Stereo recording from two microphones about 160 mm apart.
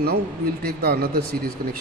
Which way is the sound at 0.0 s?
75° right (ahead or behind).